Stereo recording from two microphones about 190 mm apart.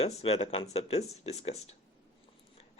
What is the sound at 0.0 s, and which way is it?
Speech, 30° left (ahead or behind).